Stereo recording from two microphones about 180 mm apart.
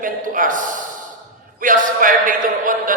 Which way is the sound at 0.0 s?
50° right (ahead or behind).